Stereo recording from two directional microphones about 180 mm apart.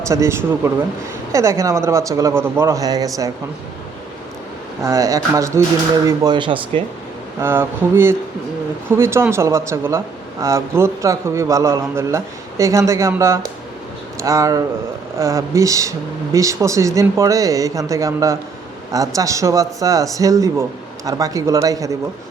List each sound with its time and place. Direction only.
0.1 s speech: 15° right (ahead or behind)
4.8 s speech: 15° right (ahead or behind)
7.3 s speech: 15° right (ahead or behind)